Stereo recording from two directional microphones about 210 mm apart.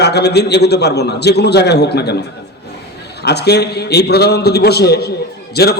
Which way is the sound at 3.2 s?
50° left (ahead or behind).